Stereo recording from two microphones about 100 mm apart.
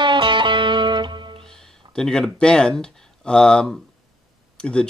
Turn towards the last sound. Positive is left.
turn(degrees=10)  # may be behind; listen again after turning